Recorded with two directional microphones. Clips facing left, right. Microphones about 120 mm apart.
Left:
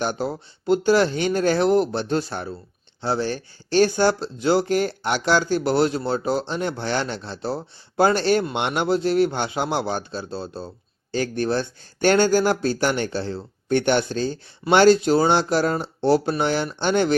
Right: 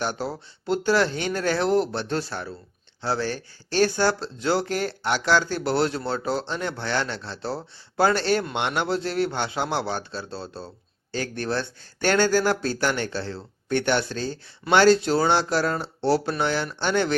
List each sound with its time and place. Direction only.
0.0 s speech: 15° left (ahead or behind)